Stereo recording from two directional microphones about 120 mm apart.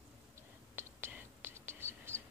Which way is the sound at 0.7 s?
20° right (ahead or behind).